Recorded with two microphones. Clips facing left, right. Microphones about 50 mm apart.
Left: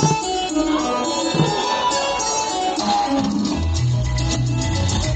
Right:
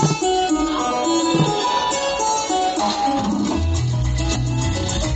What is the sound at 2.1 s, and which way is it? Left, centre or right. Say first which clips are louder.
Music: right 2 dB; centre.